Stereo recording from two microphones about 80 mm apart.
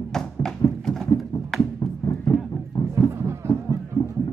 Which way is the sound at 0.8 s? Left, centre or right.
Centre.